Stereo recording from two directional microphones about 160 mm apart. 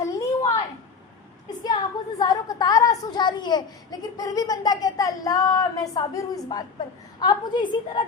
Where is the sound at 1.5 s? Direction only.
25° left (ahead or behind).